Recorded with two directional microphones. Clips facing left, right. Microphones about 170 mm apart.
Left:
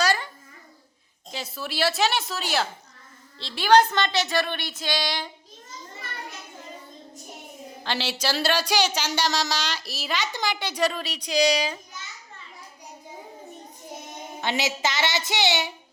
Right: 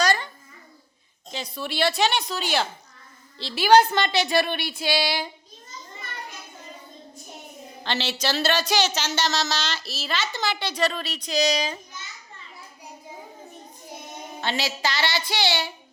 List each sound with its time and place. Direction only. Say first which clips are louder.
0.0 s babbling: right 1 dB; 5° left (ahead or behind)
1.3 s a woman's voice: right 2 dB; 5° left (ahead or behind)
7.9 s speech: right 1 dB; 10° left (ahead or behind)
14.4 s a woman's voice: left 1 dB; 20° left (ahead or behind)